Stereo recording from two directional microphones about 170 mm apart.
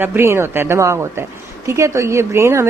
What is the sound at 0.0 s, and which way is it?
A woman's voice, 15° right (ahead or behind).